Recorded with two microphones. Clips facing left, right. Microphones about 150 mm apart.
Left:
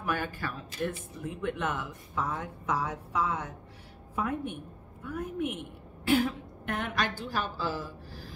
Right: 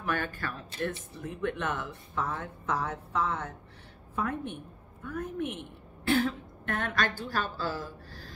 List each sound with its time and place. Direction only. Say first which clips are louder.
0.0 s a woman's voice: even; 10° left (ahead or behind)